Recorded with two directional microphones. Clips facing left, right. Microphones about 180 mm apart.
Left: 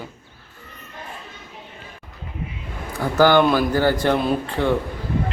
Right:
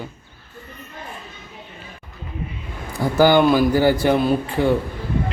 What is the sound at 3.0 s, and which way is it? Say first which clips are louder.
A man's voice: right 1 dB; 10° right (ahead or behind).